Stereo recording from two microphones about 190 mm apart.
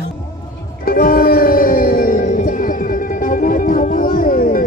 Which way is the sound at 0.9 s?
50° left (ahead or behind).